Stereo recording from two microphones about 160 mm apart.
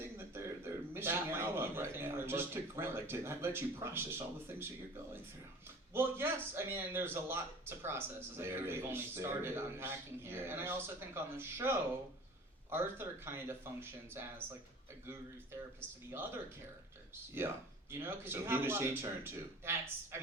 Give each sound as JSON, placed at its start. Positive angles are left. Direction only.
{"t": 0.0, "sound": "a sound", "side_deg": -15}
{"t": 0.9, "sound": "a man's voice", "side_deg": -15}
{"t": 5.9, "sound": "a man's voice", "side_deg": -15}
{"t": 17.4, "sound": "a man's voice", "side_deg": -15}